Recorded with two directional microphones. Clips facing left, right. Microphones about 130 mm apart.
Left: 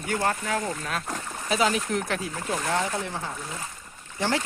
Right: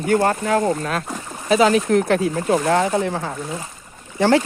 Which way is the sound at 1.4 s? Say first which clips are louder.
Right 9 dB; 90° right.